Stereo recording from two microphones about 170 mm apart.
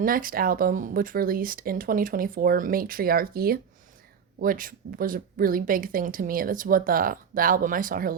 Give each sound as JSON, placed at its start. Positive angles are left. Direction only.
{"t": 0.0, "sound": "a woman's voice", "side_deg": -55}